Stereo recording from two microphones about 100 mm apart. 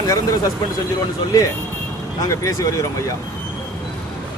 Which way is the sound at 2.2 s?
30° left (ahead or behind).